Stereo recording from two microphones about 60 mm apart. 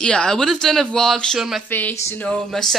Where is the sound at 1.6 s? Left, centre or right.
Left.